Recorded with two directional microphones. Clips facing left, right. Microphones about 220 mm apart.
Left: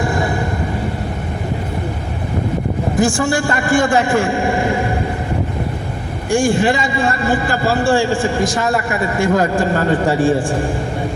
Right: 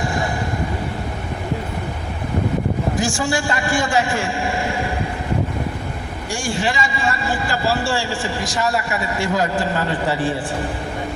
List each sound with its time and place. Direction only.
3.0 s a man's voice: 55° left (ahead or behind)
6.3 s a man's voice: 55° left (ahead or behind)